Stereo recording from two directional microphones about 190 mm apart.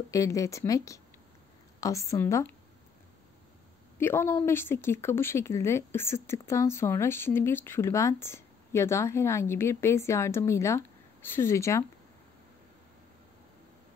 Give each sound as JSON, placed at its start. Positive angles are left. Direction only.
{"t": 0.1, "sound": "speech", "side_deg": 15}
{"t": 4.0, "sound": "speech", "side_deg": 10}